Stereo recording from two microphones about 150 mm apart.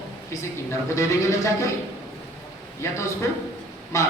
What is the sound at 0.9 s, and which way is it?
Speech, 20° left (ahead or behind).